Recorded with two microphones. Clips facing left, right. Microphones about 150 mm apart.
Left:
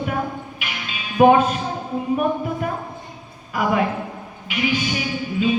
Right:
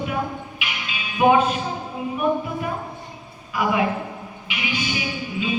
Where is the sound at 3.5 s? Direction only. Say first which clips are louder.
Left 1 dB; 45° left (ahead or behind).